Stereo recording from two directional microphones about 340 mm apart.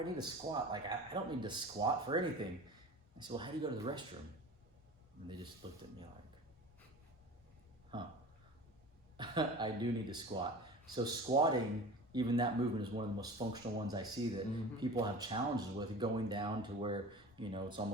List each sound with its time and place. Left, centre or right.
0.0 s speech: centre
5.6 s speech: centre
7.9 s speech: centre
9.1 s speech: centre